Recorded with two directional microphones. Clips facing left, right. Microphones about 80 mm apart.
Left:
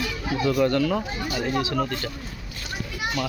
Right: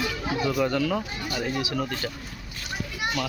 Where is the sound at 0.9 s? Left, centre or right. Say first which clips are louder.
Left 2 dB; centre.